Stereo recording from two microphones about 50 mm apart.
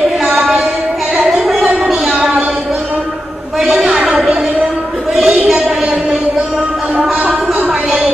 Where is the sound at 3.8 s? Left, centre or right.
Centre.